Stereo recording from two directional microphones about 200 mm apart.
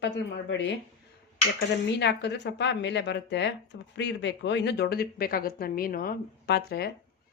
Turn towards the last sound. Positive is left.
turn(degrees=55)  # may be behind; listen again after turning